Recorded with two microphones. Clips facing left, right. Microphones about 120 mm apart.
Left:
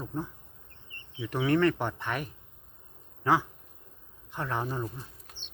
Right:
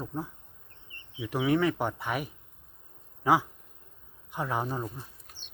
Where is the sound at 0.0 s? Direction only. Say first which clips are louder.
Even; 10° right (ahead or behind).